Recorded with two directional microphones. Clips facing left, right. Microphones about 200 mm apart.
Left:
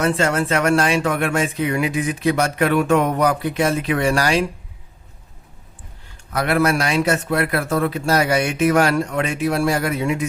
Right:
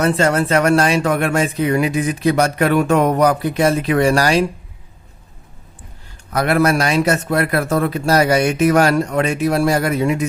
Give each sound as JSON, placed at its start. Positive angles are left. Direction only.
{"t": 0.0, "sound": "speech", "side_deg": -40}
{"t": 6.3, "sound": "speech", "side_deg": -40}